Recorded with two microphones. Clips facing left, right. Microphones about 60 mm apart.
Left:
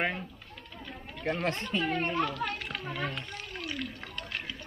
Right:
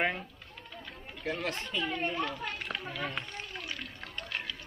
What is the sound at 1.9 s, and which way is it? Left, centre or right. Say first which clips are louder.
Speech: left 3 dB; left.